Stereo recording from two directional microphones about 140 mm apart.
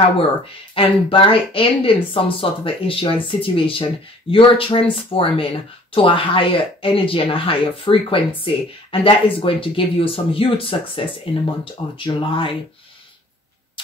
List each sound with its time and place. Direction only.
0.7 s speech: 40° left (ahead or behind)